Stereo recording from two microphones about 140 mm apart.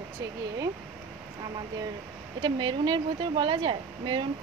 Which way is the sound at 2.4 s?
35° right (ahead or behind).